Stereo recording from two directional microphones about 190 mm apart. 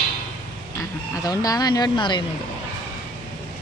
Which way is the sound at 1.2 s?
20° left (ahead or behind).